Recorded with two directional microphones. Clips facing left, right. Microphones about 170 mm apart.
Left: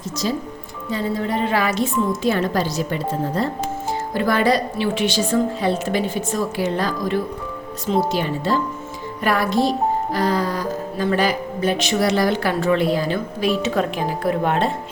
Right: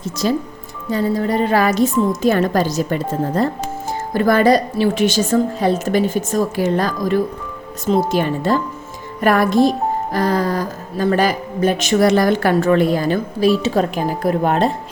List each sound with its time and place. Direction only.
0.2 s speech: 60° right (ahead or behind)
0.9 s speech: 40° right (ahead or behind)